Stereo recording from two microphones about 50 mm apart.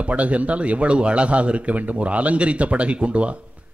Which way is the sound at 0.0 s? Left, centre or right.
Right.